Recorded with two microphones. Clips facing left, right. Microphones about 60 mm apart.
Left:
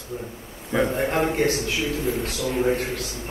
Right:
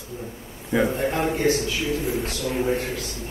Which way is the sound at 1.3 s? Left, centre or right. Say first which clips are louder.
Right 1 dB; left.